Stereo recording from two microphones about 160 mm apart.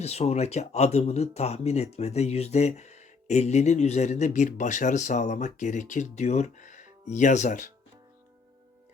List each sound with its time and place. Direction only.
0.0 s speech: 40° left (ahead or behind)